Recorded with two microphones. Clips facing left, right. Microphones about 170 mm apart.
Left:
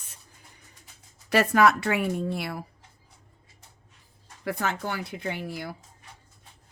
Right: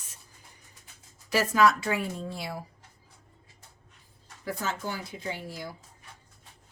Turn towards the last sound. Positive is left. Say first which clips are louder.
# left 4 dB
turn(degrees=65)  # may be behind; listen again after turning